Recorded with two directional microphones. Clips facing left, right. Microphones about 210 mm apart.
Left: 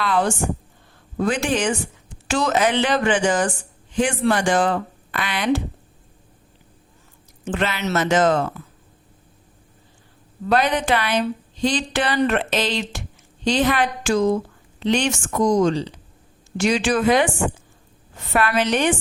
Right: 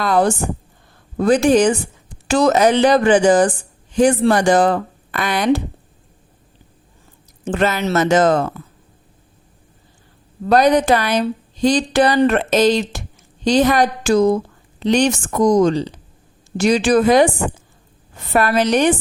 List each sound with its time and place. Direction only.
0.0 s a woman's voice: 40° right (ahead or behind)
7.4 s a woman's voice: 40° right (ahead or behind)
10.4 s a woman's voice: 40° right (ahead or behind)